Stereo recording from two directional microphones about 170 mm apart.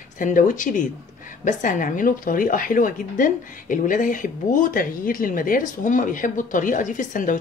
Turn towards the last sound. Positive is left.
turn(degrees=50)  # may be behind; listen again after turning